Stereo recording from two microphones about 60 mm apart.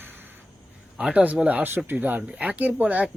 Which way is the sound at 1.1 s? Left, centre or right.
Right.